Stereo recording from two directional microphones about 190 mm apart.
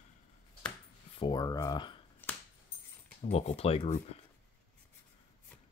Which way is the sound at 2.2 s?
10° left (ahead or behind).